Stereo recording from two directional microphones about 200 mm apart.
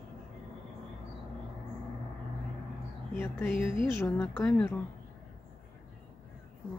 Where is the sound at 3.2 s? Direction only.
10° left (ahead or behind).